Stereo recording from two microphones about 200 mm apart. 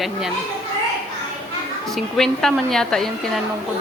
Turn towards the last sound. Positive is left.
turn(degrees=0)  # may be behind; listen again after turning